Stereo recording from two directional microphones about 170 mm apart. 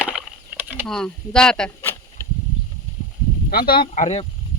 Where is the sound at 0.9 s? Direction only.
5° left (ahead or behind).